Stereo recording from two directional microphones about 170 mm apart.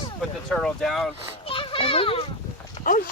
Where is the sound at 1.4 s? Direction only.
30° left (ahead or behind).